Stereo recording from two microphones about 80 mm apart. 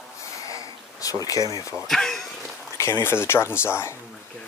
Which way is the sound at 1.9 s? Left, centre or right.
Centre.